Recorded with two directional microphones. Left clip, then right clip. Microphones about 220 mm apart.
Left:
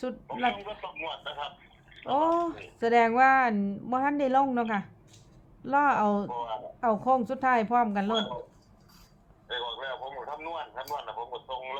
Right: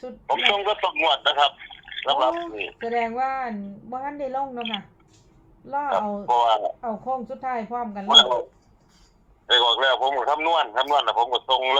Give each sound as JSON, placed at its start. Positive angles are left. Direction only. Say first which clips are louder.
{"t": 0.3, "sound": "speech", "louder": "right 11 dB", "side_deg": -55}
{"t": 2.8, "sound": "speech", "louder": "left 4 dB", "side_deg": 30}
{"t": 6.2, "sound": "speech", "louder": "right 15 dB", "side_deg": -50}
{"t": 6.8, "sound": "speech", "louder": "left 3 dB", "side_deg": 30}
{"t": 8.1, "sound": "speech", "louder": "right 15 dB", "side_deg": -50}
{"t": 9.5, "sound": "speech", "louder": "right 16 dB", "side_deg": -55}